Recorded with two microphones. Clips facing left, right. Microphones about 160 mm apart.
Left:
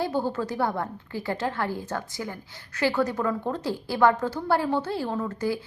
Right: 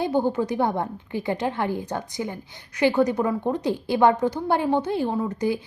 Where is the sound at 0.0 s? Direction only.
20° right (ahead or behind).